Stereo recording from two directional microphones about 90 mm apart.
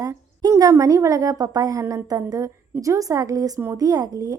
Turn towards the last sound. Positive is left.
turn(degrees=-40)  # may be behind; listen again after turning